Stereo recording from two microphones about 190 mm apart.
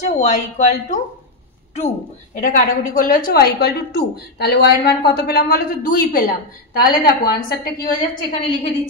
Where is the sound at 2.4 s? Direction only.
45° left (ahead or behind).